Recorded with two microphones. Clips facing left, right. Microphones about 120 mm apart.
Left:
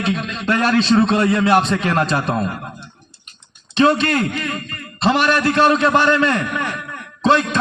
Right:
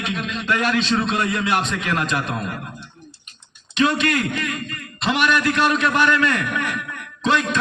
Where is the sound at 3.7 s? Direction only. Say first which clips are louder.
Left 4 dB; 35° left (ahead or behind).